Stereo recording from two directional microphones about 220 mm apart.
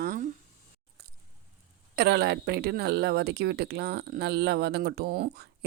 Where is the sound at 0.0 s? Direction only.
40° right (ahead or behind).